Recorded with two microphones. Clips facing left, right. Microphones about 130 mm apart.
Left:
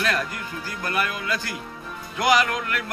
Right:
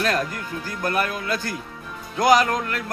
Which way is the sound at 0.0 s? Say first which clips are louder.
Right 3 dB; 40° right (ahead or behind).